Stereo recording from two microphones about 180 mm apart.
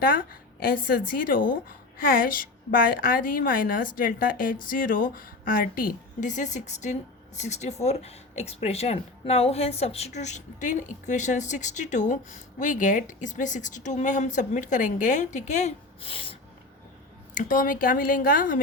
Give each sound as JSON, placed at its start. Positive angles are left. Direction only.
{"t": 0.0, "sound": "a woman's voice", "side_deg": 50}
{"t": 17.3, "sound": "a woman's voice", "side_deg": 45}